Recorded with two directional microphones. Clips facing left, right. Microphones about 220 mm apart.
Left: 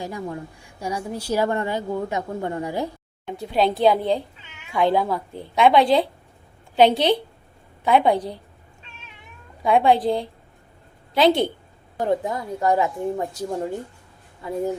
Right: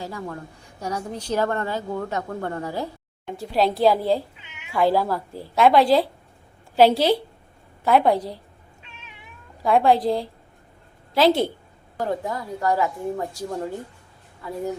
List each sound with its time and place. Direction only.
0.0 s a woman's voice: 15° left (ahead or behind)
3.3 s speech: centre (ahead or behind)
9.6 s speech: centre (ahead or behind)
11.9 s speech: 20° left (ahead or behind)
14.4 s speech: 20° left (ahead or behind)